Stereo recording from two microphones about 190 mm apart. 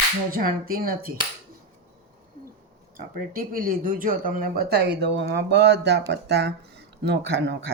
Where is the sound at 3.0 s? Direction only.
50° right (ahead or behind); by 7.6 s 65° right (ahead or behind).